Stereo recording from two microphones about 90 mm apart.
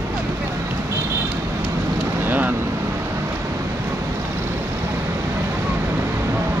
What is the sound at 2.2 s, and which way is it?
Speech, 20° right (ahead or behind).